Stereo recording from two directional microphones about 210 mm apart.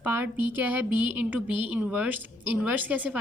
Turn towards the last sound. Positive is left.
turn(degrees=-5)  # may be behind; listen again after turning